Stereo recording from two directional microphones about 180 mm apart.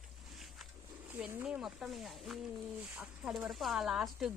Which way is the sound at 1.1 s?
10° right (ahead or behind).